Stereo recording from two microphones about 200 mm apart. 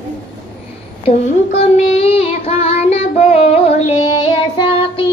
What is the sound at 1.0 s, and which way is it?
Child singing, 30° left (ahead or behind).